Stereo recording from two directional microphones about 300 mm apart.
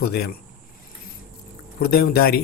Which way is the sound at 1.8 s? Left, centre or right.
Left.